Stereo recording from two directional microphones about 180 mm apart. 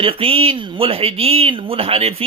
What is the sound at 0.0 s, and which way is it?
Speech, 30° right (ahead or behind).